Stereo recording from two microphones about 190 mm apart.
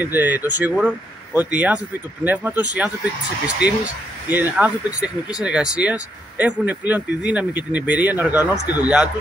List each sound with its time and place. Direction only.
0.0 s speech: 10° right (ahead or behind)